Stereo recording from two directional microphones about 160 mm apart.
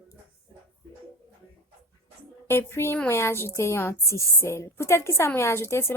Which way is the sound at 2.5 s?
15° left (ahead or behind).